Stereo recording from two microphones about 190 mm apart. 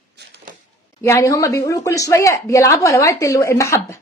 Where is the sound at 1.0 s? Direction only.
15° left (ahead or behind).